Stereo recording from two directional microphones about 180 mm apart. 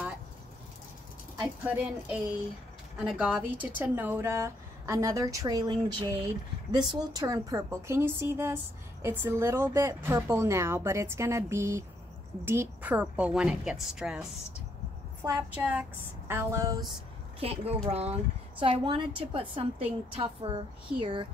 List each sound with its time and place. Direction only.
1.4 s a woman's voice: 5° right (ahead or behind)
17.4 s a woman's voice: 35° right (ahead or behind)